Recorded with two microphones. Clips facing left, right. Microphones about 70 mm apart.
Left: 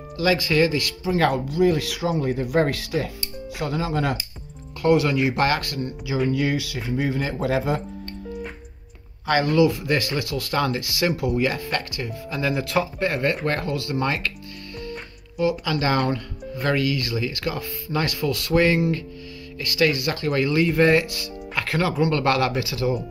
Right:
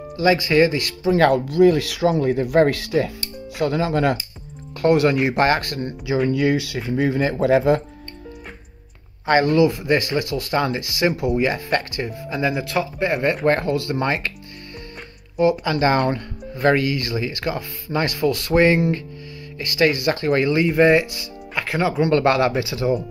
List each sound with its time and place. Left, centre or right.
0.2 s speech: right
1.0 s speech: right
9.3 s speech: right
12.4 s speech: centre
13.5 s speech: right
15.3 s speech: right
20.6 s speech: centre
22.0 s speech: right